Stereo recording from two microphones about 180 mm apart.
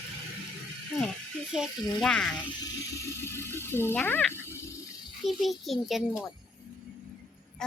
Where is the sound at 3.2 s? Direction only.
15° left (ahead or behind).